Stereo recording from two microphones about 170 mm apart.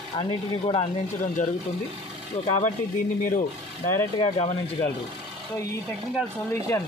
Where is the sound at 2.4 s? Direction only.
45° left (ahead or behind).